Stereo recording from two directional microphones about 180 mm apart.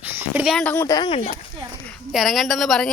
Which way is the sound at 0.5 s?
10° left (ahead or behind).